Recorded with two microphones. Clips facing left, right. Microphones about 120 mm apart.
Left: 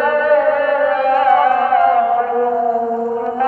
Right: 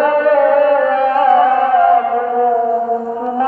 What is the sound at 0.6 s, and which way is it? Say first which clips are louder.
Music: right 2 dB; 30° right (ahead or behind).